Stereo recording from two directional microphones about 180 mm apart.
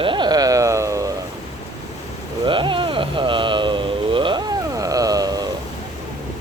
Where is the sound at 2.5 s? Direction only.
25° right (ahead or behind).